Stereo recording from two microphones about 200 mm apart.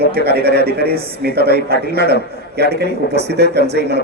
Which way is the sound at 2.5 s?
55° right (ahead or behind).